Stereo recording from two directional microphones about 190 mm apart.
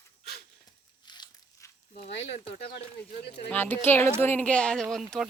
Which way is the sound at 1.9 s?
70° left (ahead or behind).